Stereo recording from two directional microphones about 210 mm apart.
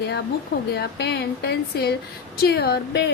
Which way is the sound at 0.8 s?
50° left (ahead or behind).